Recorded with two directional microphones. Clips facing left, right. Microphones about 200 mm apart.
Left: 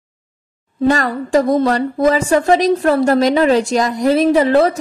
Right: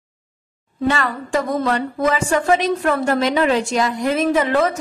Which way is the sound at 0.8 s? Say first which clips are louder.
Left 5 dB; 40° left (ahead or behind).